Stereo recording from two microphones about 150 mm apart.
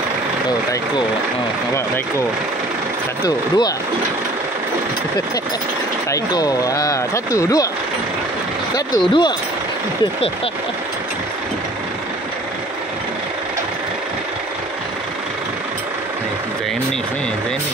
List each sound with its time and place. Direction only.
3.3 s speech: 25° left (ahead or behind)
6.0 s speech: 25° left (ahead or behind)
8.7 s speech: 30° left (ahead or behind)